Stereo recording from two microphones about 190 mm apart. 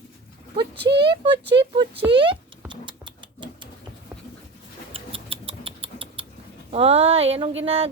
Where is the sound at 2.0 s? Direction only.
25° right (ahead or behind).